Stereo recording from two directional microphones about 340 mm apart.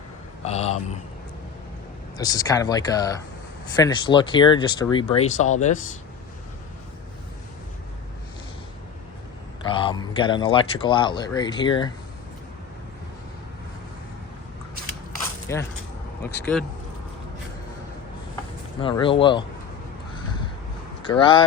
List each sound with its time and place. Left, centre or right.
0.4 s speech: centre
2.1 s speech: centre
9.6 s speech: centre
15.5 s speech: centre
18.8 s speech: centre
21.1 s speech: centre